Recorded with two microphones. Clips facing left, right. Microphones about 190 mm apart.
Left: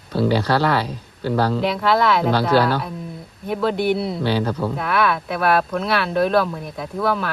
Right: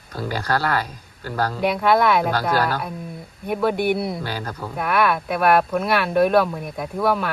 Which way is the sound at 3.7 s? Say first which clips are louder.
Left 1 dB; 50° right (ahead or behind).